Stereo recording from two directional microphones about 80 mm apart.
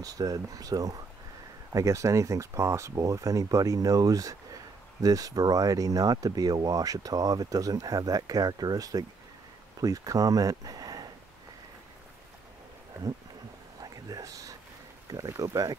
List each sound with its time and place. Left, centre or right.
0.0 s speech: right
13.7 s a sound: right
15.1 s speech: right